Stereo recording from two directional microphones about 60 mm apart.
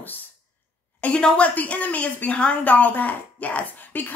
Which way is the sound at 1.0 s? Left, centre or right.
Left.